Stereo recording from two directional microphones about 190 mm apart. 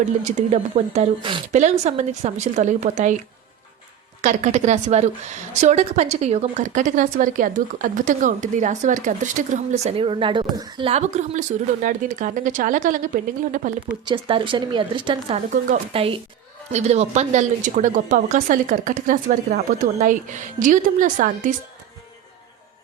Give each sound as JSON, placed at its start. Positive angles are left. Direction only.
{"t": 0.3, "sound": "speech", "side_deg": -35}
{"t": 4.2, "sound": "speech", "side_deg": -40}
{"t": 14.0, "sound": "a woman's voice", "side_deg": -25}
{"t": 15.4, "sound": "a woman's voice", "side_deg": -45}
{"t": 15.9, "sound": "a woman's voice", "side_deg": -30}